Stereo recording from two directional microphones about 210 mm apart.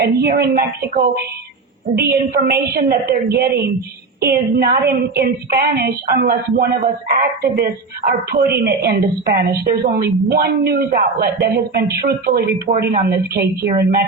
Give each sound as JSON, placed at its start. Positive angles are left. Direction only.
{"t": 0.0, "sound": "a woman's voice", "side_deg": -50}